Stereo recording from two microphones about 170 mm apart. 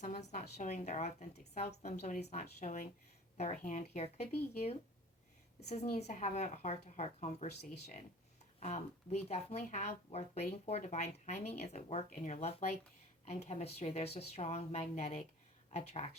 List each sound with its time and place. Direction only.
0.3 s a woman's voice: 40° left (ahead or behind)
8.6 s speech: 40° left (ahead or behind)